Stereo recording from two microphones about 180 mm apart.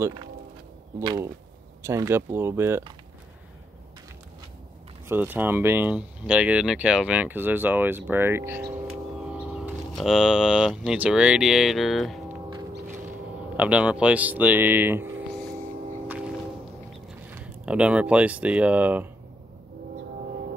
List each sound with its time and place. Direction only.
1.0 s speech: 15° right (ahead or behind)
5.0 s speech: 10° right (ahead or behind)
13.6 s speech: 5° right (ahead or behind)
17.3 s speech: 5° right (ahead or behind)